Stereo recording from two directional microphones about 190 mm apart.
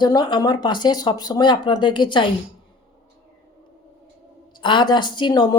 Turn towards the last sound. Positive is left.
turn(degrees=20)  # may be behind; listen again after turning